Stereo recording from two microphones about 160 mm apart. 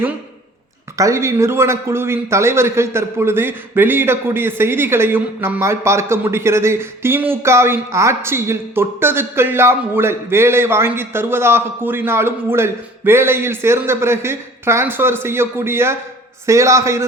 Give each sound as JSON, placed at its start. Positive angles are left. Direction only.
{"t": 0.9, "sound": "a man's voice", "side_deg": -20}